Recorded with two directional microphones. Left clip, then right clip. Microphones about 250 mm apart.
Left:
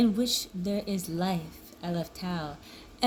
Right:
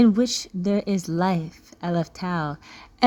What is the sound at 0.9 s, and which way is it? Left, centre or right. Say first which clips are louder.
Speech: right 8 dB; right.